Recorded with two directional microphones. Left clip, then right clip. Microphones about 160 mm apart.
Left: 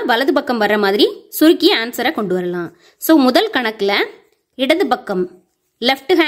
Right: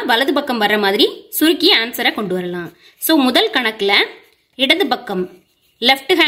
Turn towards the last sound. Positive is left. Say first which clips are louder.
# right 1 dB
turn(degrees=40)  # may be behind; listen again after turning